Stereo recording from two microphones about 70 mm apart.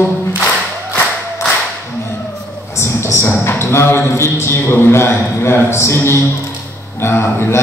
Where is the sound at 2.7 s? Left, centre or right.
Left.